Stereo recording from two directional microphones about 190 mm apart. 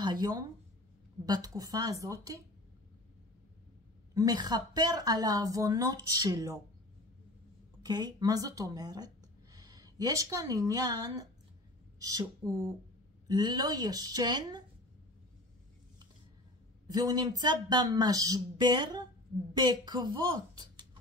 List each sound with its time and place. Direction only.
0.0 s a sound: 20° right (ahead or behind)
1.2 s a woman's voice: 20° right (ahead or behind)
4.1 s a woman's voice: 20° right (ahead or behind)
7.8 s speech: 20° right (ahead or behind)
13.3 s a woman's voice: 20° right (ahead or behind)
16.8 s a woman's voice: 20° right (ahead or behind)